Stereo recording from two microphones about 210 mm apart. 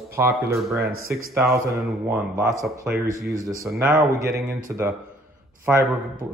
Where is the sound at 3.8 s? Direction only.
15° right (ahead or behind).